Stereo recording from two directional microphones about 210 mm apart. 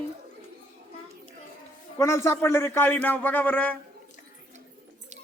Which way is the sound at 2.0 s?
15° left (ahead or behind).